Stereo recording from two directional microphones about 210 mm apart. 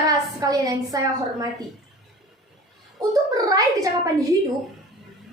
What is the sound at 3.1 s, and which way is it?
A woman's voice, 15° right (ahead or behind).